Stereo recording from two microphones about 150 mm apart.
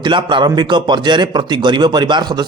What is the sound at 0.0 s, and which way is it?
A man's voice, 30° right (ahead or behind).